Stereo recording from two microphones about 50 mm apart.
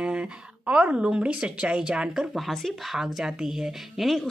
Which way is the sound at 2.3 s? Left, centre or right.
Centre.